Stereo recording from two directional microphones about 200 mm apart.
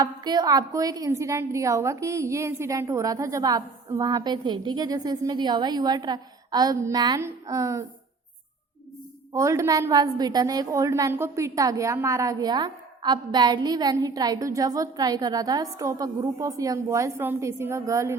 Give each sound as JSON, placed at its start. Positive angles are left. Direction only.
{"t": 0.0, "sound": "a woman's voice", "side_deg": -20}
{"t": 9.3, "sound": "a woman's voice", "side_deg": -15}